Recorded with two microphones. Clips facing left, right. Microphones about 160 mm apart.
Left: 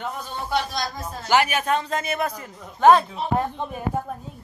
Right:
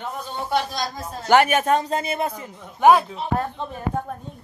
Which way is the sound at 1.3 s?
50° right (ahead or behind).